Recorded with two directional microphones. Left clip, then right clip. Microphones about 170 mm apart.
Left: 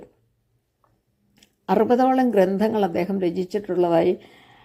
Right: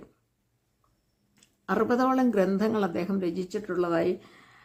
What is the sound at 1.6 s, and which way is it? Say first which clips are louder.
Speech: left 7 dB; 20° left (ahead or behind).